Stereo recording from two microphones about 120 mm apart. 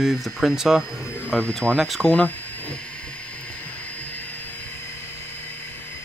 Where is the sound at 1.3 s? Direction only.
10° left (ahead or behind).